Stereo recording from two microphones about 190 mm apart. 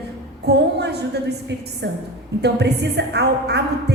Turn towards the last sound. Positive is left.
turn(degrees=-60)  # may be behind; listen again after turning